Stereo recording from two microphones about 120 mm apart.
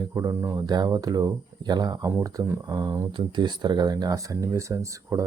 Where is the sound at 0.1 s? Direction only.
25° right (ahead or behind).